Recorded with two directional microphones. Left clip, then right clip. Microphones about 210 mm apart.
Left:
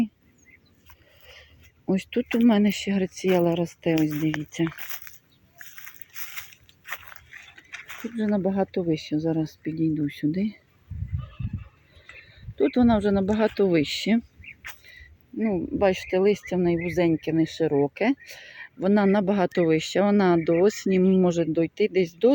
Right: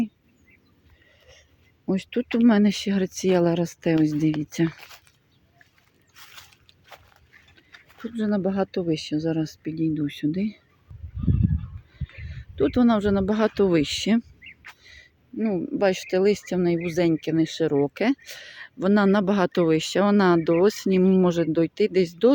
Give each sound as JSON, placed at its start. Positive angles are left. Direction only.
{"t": 1.9, "sound": "speech", "side_deg": 0}
{"t": 4.8, "sound": "a sound", "side_deg": 5}
{"t": 6.8, "sound": "biting", "side_deg": 10}
{"t": 8.1, "sound": "speech", "side_deg": 0}
{"t": 12.3, "sound": "speech", "side_deg": -5}